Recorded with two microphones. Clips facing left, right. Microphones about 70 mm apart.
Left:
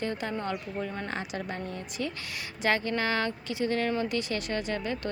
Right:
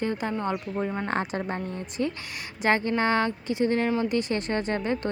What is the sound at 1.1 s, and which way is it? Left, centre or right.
Speech, right.